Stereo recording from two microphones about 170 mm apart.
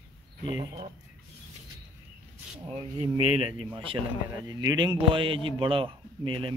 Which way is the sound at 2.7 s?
35° right (ahead or behind).